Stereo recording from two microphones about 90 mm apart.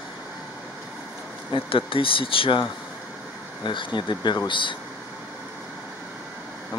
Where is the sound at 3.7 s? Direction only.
65° left (ahead or behind).